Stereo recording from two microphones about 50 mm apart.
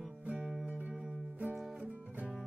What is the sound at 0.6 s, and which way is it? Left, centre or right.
Music, right.